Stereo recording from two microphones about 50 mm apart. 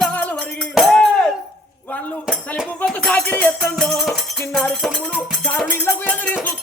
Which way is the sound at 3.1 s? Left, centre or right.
Left.